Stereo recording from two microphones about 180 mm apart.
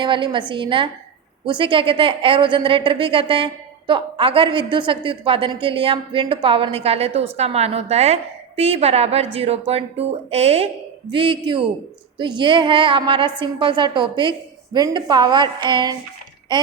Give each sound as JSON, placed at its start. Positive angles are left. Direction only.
{"t": 0.0, "sound": "a woman's voice", "side_deg": -25}